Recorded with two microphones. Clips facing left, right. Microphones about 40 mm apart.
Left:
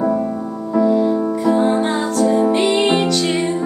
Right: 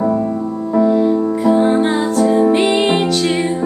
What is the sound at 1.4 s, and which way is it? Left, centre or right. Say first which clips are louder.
Music: right 3 dB; centre.